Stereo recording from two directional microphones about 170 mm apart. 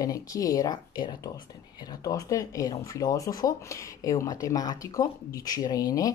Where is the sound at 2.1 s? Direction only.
20° left (ahead or behind).